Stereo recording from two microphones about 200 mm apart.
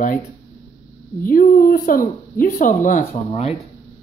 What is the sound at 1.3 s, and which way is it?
Speech, 45° left (ahead or behind).